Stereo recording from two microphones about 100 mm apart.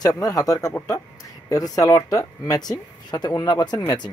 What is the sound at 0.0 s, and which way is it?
Speech, 35° left (ahead or behind).